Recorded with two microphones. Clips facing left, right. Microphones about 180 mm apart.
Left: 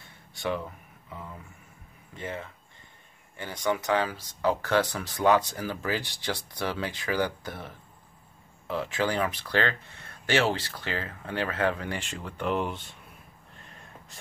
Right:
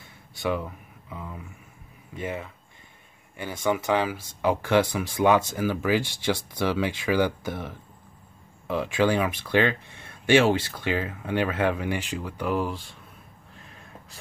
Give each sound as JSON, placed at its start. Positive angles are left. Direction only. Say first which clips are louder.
{"t": 2.1, "sound": "speech", "louder": "right 4 dB", "side_deg": -15}
{"t": 8.6, "sound": "speech", "louder": "right 5 dB", "side_deg": -15}